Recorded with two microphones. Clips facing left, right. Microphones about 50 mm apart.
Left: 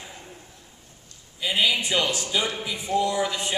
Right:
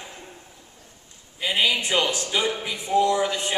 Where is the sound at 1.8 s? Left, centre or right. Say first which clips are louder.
Right 1 dB; centre.